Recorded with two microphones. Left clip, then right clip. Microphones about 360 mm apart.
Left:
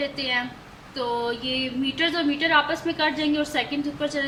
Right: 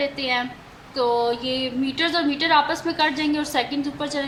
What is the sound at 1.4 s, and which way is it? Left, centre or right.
A woman's voice, centre.